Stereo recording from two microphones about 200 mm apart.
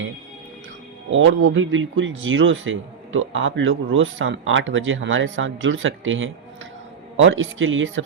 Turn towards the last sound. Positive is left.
turn(degrees=-75)  # may be behind; listen again after turning